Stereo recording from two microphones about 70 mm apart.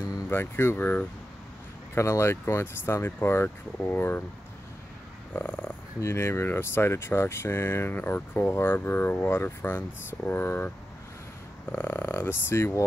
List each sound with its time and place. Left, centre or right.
0.3 s speech: left
2.0 s speech: left
5.3 s a sound: left
5.9 s speech: left
11.7 s speech: left